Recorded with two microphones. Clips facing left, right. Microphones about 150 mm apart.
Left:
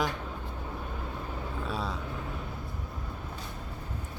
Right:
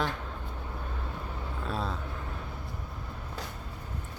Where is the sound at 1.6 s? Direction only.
5° left (ahead or behind).